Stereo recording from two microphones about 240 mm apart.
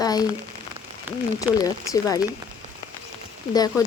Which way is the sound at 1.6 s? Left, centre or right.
Centre.